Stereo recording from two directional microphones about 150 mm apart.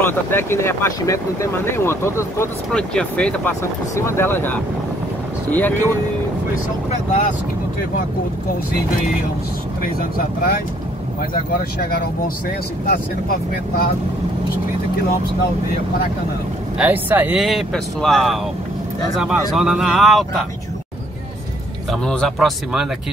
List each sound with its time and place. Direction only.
0.0 s speech: 15° left (ahead or behind)
2.7 s speech: 5° left (ahead or behind)
3.9 s speech: 20° left (ahead or behind)
9.8 s speech: 75° left (ahead or behind)
12.8 s speech: 90° left
16.7 s speech: 10° right (ahead or behind)
17.4 s speech: centre (ahead or behind)
21.9 s speech: 5° left (ahead or behind)